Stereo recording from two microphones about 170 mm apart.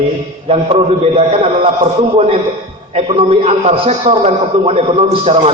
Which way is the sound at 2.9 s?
35° right (ahead or behind).